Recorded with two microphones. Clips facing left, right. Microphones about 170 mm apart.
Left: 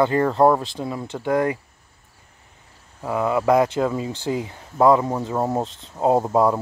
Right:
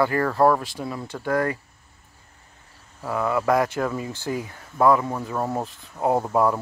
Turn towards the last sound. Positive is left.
turn(degrees=20)  # may be behind; listen again after turning